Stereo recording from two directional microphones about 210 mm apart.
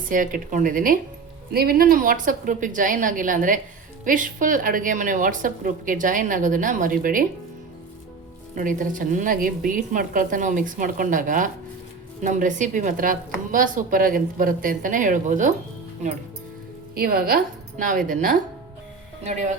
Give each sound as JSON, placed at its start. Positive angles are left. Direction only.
{"t": 0.1, "sound": "a woman's voice", "side_deg": -40}
{"t": 8.5, "sound": "a woman's voice", "side_deg": -40}
{"t": 17.0, "sound": "a woman's voice", "side_deg": -45}